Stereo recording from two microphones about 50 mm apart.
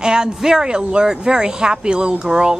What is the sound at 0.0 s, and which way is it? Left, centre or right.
Speech, centre.